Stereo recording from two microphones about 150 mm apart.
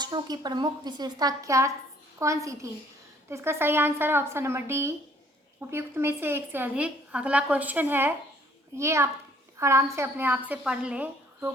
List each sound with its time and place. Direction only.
0.0 s a woman's voice: 30° right (ahead or behind); by 11.5 s 10° right (ahead or behind)